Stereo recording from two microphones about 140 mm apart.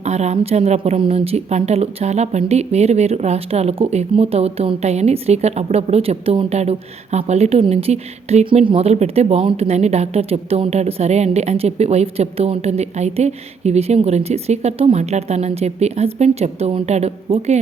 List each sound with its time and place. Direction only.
0.0 s speech: 55° right (ahead or behind)